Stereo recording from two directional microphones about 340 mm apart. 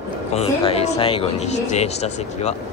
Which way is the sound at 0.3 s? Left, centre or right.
Centre.